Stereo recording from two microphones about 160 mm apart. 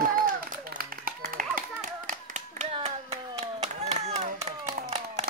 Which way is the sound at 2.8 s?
40° right (ahead or behind).